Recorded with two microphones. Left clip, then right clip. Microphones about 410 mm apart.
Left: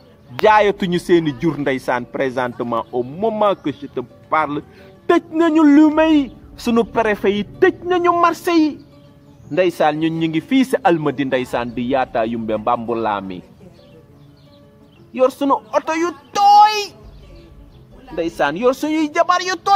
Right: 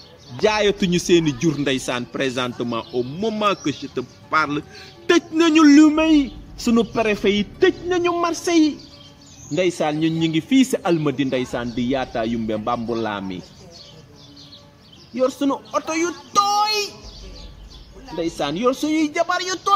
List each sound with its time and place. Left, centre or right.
0.5 s a man's voice: left
15.1 s a man's voice: left
18.1 s a man's voice: left